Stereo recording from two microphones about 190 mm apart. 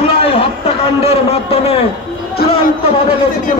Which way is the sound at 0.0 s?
30° left (ahead or behind).